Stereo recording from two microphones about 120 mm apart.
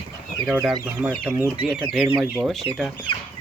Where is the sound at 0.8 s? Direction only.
10° right (ahead or behind).